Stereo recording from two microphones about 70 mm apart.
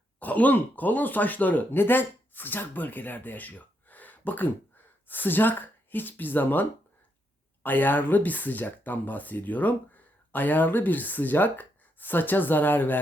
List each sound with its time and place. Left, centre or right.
0.2 s speech: left